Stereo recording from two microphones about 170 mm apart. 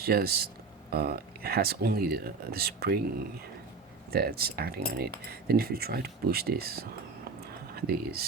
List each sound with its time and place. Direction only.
0.0 s speech: 65° right (ahead or behind)
4.1 s speech: 65° right (ahead or behind)